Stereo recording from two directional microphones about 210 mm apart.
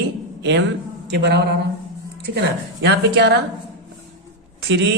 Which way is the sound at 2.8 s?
55° right (ahead or behind).